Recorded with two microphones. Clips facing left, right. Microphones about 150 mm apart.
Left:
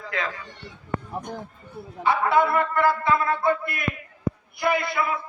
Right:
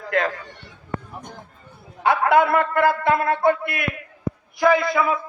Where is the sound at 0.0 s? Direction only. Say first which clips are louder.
Right 8 dB; 50° right (ahead or behind).